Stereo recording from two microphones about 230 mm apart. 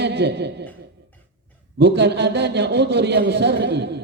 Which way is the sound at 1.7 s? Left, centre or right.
Right.